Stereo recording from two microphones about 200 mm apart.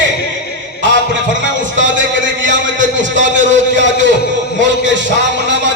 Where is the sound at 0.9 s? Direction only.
65° right (ahead or behind).